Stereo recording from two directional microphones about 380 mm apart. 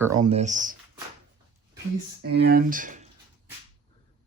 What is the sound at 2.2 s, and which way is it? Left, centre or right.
Speech, right.